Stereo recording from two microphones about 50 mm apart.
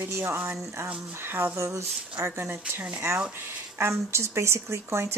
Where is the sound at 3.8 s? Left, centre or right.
Right.